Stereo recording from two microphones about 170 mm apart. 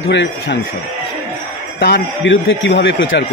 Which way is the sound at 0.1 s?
90° left.